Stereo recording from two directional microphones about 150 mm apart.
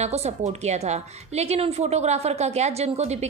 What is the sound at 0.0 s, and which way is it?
A woman's voice, 45° right (ahead or behind).